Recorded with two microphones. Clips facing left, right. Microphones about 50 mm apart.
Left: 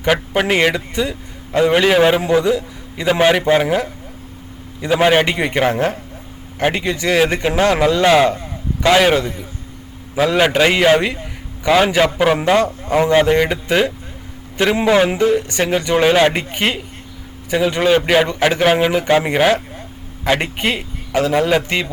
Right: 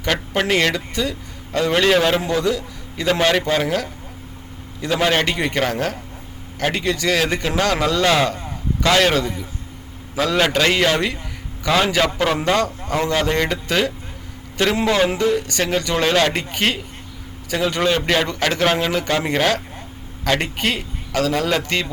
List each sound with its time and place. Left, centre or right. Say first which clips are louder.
0.0 s a man's voice: left 4 dB; centre